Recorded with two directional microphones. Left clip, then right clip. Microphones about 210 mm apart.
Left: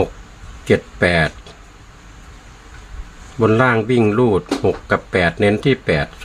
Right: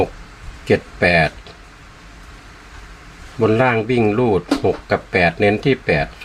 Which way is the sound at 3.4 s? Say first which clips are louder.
Left 1 dB; 20° left (ahead or behind).